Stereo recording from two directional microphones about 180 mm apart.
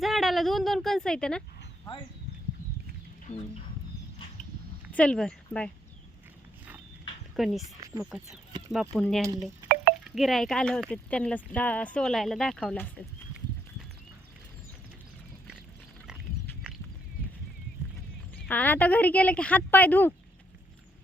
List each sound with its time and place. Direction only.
0.0 s speech: centre (ahead or behind)
3.3 s chicken: 40° left (ahead or behind)
4.9 s speech: 5° left (ahead or behind)
7.3 s speech: centre (ahead or behind)
7.8 s speech: 15° right (ahead or behind)
8.7 s speech: centre (ahead or behind)
18.4 s speech: 10° left (ahead or behind)